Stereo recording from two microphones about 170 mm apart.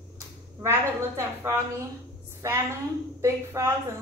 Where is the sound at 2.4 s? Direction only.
15° right (ahead or behind).